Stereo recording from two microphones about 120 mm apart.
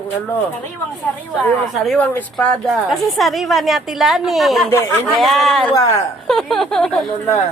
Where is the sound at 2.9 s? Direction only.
Centre (ahead or behind).